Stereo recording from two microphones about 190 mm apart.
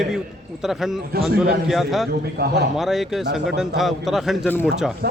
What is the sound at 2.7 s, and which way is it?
A man's voice, centre (ahead or behind).